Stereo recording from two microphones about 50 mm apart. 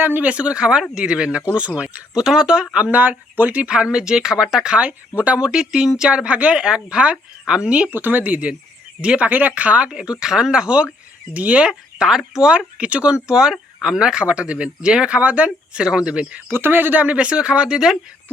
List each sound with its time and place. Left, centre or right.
0.0 s speech: right
0.3 s speech: right
2.1 s speech: centre
2.7 s speech: right
7.9 s speech: right
11.7 s speech: centre
12.5 s speech: right
13.3 s speech: centre; by 15.8 s right
15.8 s speech: centre
16.5 s speech: right; by 17.9 s centre